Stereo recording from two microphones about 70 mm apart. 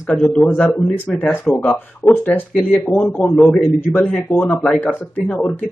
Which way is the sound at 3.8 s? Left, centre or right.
Left.